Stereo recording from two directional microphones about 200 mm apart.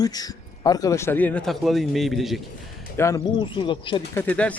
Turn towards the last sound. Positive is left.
turn(degrees=5)  # may be behind; listen again after turning